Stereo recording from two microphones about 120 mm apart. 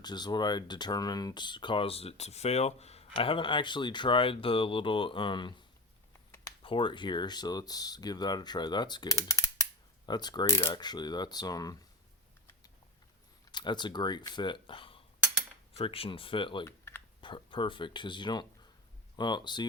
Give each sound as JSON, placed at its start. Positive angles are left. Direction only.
{"t": 0.0, "sound": "speech", "side_deg": 35}
{"t": 6.6, "sound": "speech", "side_deg": 45}
{"t": 10.4, "sound": "speech", "side_deg": 25}
{"t": 10.7, "sound": "speech", "side_deg": 35}
{"t": 13.5, "sound": "speech", "side_deg": 40}
{"t": 16.6, "sound": "computer keyboard", "side_deg": 20}
{"t": 17.2, "sound": "speech", "side_deg": 45}